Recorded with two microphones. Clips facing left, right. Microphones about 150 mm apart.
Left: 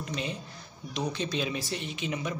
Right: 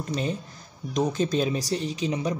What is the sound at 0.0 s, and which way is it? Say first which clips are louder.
Speech: right 6 dB; 40° right (ahead or behind).